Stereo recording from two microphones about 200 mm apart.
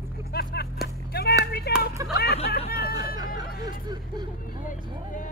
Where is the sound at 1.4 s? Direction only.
55° left (ahead or behind).